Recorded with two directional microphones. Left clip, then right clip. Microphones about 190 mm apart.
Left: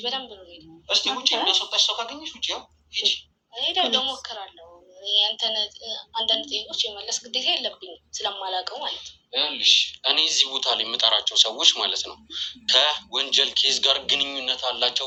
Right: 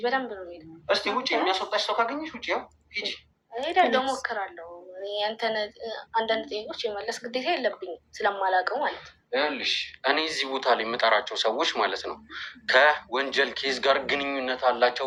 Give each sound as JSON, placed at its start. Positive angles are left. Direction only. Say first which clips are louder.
{"t": 0.0, "sound": "a woman's voice", "louder": "right 3 dB", "side_deg": -40}